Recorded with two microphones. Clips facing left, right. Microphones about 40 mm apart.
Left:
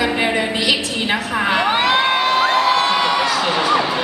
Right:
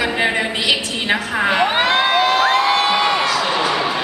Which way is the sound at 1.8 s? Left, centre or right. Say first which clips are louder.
Even; left.